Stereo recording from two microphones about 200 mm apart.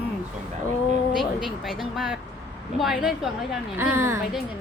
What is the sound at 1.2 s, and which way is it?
Speech, centre (ahead or behind).